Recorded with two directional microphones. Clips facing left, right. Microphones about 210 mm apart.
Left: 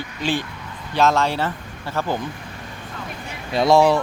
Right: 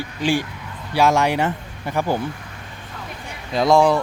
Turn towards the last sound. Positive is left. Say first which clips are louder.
# even
turn(degrees=0)  # may be behind; listen again after turning